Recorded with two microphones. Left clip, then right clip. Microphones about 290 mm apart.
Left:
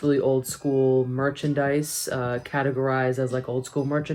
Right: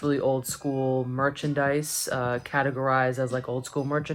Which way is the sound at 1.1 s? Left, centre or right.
Centre.